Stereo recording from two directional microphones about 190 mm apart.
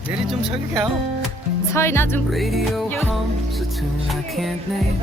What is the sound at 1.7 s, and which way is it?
Speech, 15° left (ahead or behind).